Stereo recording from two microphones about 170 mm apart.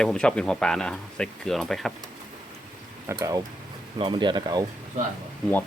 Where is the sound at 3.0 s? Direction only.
20° right (ahead or behind).